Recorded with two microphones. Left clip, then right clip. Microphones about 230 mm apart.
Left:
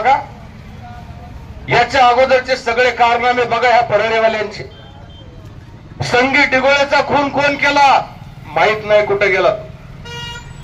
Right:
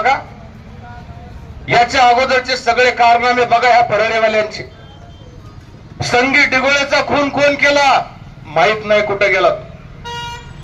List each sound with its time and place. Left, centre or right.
1.6 s a man's voice: right
6.0 s a man's voice: right